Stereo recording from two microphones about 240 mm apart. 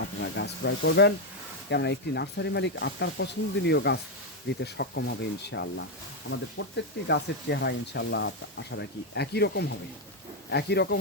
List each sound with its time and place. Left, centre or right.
0.2 s speech: left